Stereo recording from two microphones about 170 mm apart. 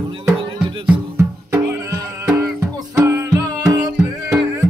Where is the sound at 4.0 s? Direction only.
5° right (ahead or behind).